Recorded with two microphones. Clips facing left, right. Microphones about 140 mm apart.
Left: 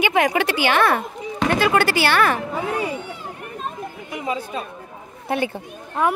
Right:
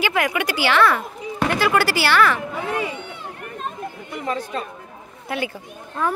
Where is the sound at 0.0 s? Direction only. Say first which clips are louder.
Left 3 dB; 20° left (ahead or behind).